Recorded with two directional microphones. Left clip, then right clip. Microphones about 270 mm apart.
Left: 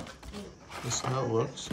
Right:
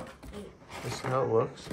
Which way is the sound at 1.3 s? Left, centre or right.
Centre.